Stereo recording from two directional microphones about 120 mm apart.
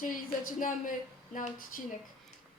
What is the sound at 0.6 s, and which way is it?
Speech, 90° left.